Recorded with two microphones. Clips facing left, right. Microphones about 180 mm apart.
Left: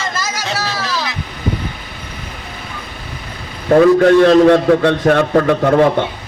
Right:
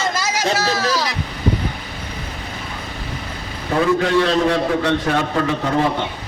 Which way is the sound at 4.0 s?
50° left (ahead or behind).